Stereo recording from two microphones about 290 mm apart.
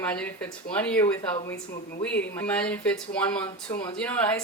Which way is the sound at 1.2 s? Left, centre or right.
Centre.